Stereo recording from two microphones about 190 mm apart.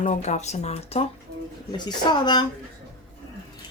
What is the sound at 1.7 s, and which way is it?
Speech, 25° left (ahead or behind).